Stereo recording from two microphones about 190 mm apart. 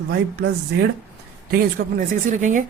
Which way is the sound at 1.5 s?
50° right (ahead or behind).